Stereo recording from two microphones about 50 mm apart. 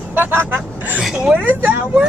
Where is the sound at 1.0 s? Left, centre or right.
Centre.